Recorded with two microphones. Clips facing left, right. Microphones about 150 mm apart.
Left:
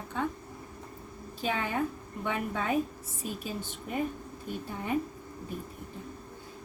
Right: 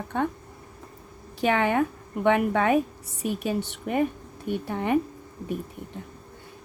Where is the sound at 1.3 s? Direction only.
70° right (ahead or behind).